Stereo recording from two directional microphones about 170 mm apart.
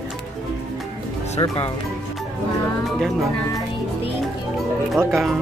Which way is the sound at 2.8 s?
Centre (ahead or behind).